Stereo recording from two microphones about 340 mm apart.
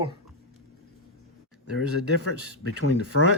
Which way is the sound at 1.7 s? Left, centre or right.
Left.